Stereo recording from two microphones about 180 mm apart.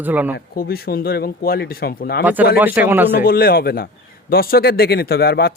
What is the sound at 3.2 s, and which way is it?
Speech, 55° left (ahead or behind).